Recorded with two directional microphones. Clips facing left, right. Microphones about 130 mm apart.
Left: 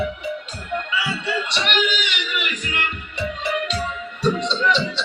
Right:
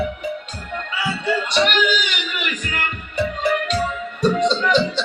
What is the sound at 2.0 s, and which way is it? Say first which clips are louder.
Music: even; 45° right (ahead or behind).